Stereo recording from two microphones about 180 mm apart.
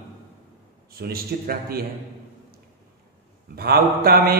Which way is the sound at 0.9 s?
55° right (ahead or behind).